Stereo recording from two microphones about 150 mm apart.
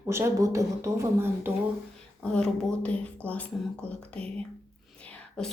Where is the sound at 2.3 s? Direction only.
5° left (ahead or behind).